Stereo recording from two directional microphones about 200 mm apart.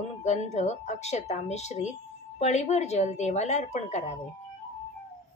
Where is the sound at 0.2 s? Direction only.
35° left (ahead or behind).